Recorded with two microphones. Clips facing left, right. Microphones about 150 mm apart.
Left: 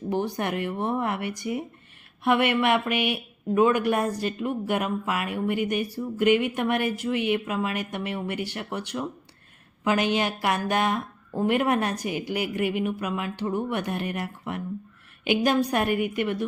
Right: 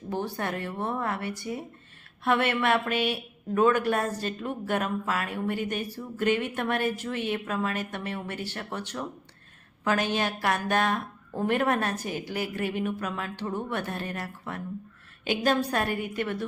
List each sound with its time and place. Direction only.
0.1 s speech: 15° left (ahead or behind)